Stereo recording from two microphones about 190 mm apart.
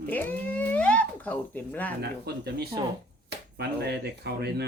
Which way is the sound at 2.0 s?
60° right (ahead or behind).